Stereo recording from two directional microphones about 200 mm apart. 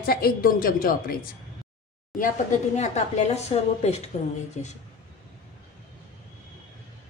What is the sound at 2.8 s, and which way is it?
A woman's voice, 35° left (ahead or behind).